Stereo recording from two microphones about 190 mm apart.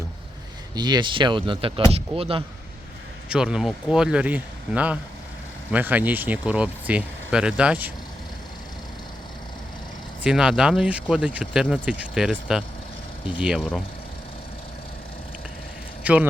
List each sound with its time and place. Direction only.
0.8 s speech: 25° right (ahead or behind)
3.2 s speech: 5° right (ahead or behind)
10.2 s speech: 5° right (ahead or behind)
16.1 s speech: 5° right (ahead or behind)